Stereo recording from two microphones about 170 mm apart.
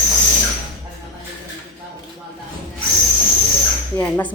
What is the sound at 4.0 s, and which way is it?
Speech, 10° left (ahead or behind).